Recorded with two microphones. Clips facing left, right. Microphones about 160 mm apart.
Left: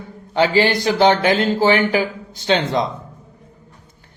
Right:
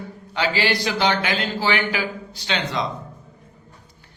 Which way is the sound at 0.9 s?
45° left (ahead or behind).